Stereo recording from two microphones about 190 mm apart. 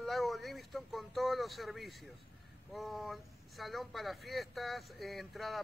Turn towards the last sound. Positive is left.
turn(degrees=0)  # may be behind; listen again after turning